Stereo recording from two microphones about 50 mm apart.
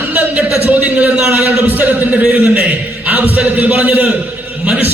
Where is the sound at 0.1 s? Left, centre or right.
Right.